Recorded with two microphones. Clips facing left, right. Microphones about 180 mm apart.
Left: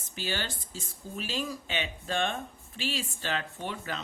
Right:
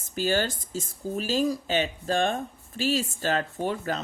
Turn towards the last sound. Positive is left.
turn(degrees=-40)  # may be behind; listen again after turning